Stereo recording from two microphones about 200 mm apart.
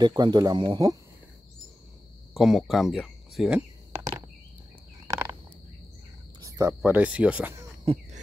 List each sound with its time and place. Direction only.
0.0 s speech: 20° right (ahead or behind)
2.3 s speech: centre (ahead or behind)
6.4 s speech: 15° right (ahead or behind)
7.8 s a sound: 25° right (ahead or behind)